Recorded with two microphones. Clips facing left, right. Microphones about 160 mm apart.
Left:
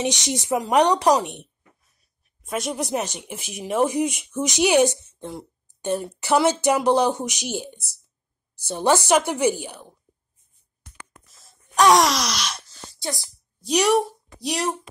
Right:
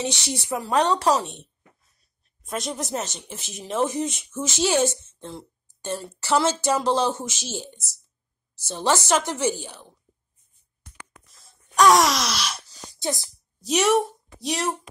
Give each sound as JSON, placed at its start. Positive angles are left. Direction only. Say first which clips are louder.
{"t": 0.0, "sound": "speech", "louder": "left 3 dB", "side_deg": 20}
{"t": 2.4, "sound": "speech", "louder": "left 3 dB", "side_deg": 5}
{"t": 11.2, "sound": "wail", "louder": "left 1 dB", "side_deg": 0}
{"t": 11.9, "sound": "a woman's voice", "louder": "left 1 dB", "side_deg": 0}
{"t": 12.9, "sound": "speech", "louder": "right 3 dB", "side_deg": -20}
{"t": 13.7, "sound": "a woman's voice", "louder": "left 1 dB", "side_deg": 0}